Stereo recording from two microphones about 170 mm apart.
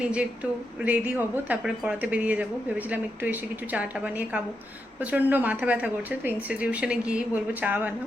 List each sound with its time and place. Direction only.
0.0 s speech: 5° right (ahead or behind)